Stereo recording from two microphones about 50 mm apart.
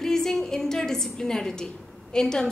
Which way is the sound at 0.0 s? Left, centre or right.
Centre.